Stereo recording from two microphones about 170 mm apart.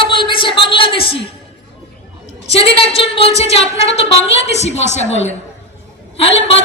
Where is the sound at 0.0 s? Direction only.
30° left (ahead or behind).